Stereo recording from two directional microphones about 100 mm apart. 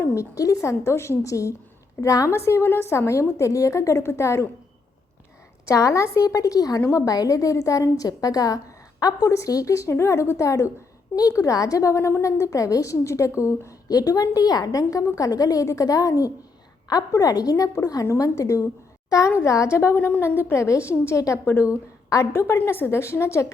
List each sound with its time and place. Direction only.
0.0 s a woman's voice: 30° left (ahead or behind)
5.6 s a woman's voice: 30° left (ahead or behind)